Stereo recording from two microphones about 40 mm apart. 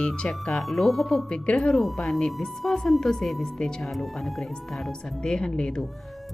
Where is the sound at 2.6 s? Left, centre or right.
Centre.